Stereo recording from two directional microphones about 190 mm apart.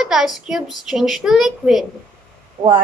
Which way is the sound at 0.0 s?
Centre (ahead or behind).